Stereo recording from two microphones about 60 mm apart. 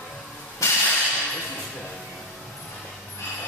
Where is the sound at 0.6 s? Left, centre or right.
Left.